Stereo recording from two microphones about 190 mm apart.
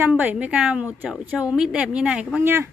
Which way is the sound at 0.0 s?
10° right (ahead or behind).